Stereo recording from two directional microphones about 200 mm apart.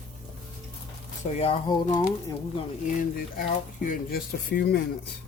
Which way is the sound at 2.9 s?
40° left (ahead or behind).